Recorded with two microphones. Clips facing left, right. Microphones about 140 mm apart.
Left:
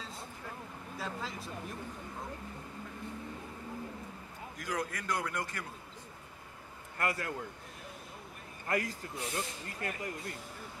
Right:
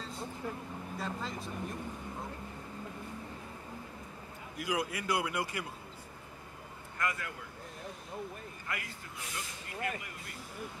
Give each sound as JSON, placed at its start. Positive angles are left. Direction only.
{"t": 0.0, "sound": "vehicle", "side_deg": 0}
{"t": 0.9, "sound": "speech", "side_deg": 0}
{"t": 4.6, "sound": "a man's voice", "side_deg": -10}
{"t": 7.0, "sound": "speech", "side_deg": 35}
{"t": 8.6, "sound": "speech", "side_deg": 40}